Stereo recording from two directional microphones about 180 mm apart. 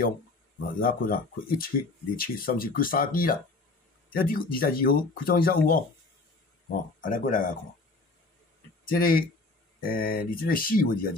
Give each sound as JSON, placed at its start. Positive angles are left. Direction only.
{"t": 0.6, "sound": "speech", "side_deg": 50}
{"t": 7.0, "sound": "speech", "side_deg": 50}
{"t": 8.8, "sound": "speech", "side_deg": 55}